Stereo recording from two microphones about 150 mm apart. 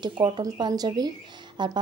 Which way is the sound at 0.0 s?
30° right (ahead or behind).